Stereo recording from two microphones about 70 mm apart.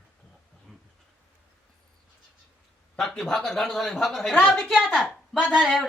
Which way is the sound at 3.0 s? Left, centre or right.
Centre.